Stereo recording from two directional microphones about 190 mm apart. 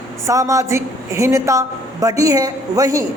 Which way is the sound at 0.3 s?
15° right (ahead or behind).